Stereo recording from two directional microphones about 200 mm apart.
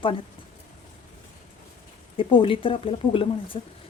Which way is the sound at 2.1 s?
25° left (ahead or behind).